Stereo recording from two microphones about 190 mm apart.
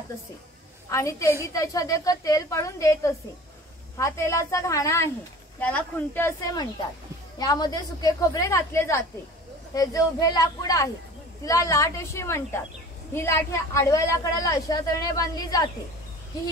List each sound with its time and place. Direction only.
0.8 s a woman's voice: 15° left (ahead or behind)